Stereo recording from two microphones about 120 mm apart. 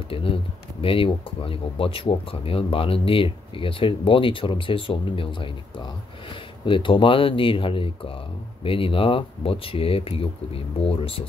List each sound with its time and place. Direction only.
0.1 s speech: 50° left (ahead or behind)